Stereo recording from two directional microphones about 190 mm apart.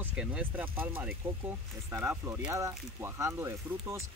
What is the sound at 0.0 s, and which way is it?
Speech, 5° right (ahead or behind).